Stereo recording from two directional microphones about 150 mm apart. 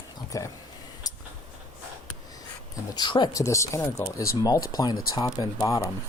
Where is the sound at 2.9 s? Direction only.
30° left (ahead or behind).